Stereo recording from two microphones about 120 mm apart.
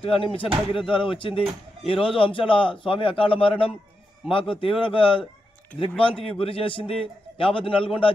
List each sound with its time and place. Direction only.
0.0 s a man's voice: 50° left (ahead or behind)
5.7 s speech: 10° left (ahead or behind)
6.3 s a man's voice: 50° left (ahead or behind)